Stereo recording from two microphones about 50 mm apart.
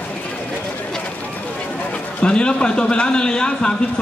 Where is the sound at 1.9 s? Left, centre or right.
Left.